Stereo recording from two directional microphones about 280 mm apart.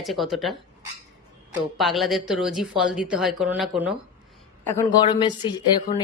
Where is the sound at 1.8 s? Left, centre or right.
Centre.